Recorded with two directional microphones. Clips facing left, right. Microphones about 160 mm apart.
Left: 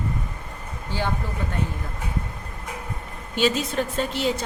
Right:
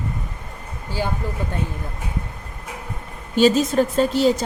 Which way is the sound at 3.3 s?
40° right (ahead or behind).